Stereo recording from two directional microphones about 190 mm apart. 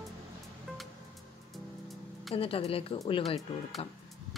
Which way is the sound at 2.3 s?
30° left (ahead or behind).